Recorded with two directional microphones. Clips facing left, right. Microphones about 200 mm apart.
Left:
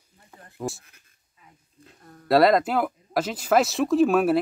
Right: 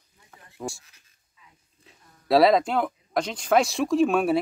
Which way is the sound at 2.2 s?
Centre (ahead or behind).